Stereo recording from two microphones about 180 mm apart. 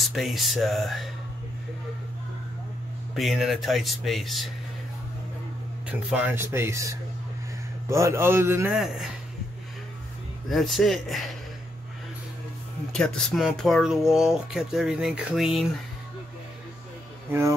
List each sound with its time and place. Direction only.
0.1 s speech: centre (ahead or behind)
3.2 s speech: centre (ahead or behind)
5.9 s speech: 10° right (ahead or behind)
8.7 s speech: centre (ahead or behind)
10.5 s speech: centre (ahead or behind)
12.9 s speech: 5° left (ahead or behind)
17.3 s speech: 15° right (ahead or behind)